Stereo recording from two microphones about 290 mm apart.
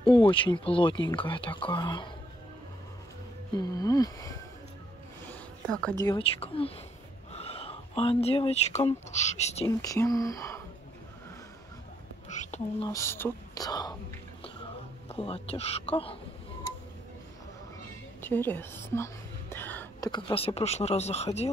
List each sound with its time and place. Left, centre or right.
0.0 s speech: centre
3.5 s speech: centre
9.7 s speech: centre
12.3 s speech: left
12.9 s speech: centre
15.0 s speech: centre
18.2 s a woman's voice: centre; by 21.5 s left